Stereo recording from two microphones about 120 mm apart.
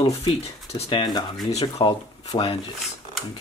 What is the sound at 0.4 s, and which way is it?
Speech, 60° left (ahead or behind).